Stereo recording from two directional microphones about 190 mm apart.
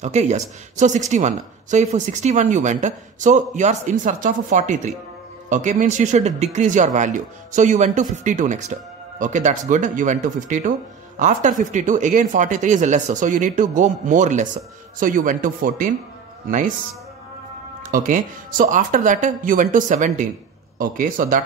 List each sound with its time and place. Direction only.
0.0 s speech: 35° right (ahead or behind)
17.8 s speech: 45° right (ahead or behind)